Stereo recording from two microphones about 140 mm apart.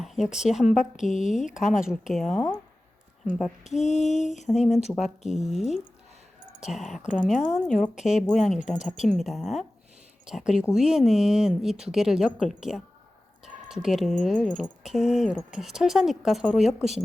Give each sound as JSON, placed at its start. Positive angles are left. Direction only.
{"t": 0.0, "sound": "a woman's voice", "side_deg": -5}
{"t": 3.6, "sound": "a woman's voice", "side_deg": 55}
{"t": 4.6, "sound": "speech", "side_deg": -5}
{"t": 7.4, "sound": "a woman's voice", "side_deg": 60}
{"t": 8.3, "sound": "speech", "side_deg": 0}